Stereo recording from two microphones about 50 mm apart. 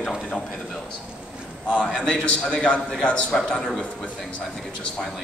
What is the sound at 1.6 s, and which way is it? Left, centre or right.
A man's voice, left.